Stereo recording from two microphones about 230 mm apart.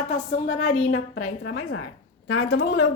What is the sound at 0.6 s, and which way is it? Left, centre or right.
Speech, left.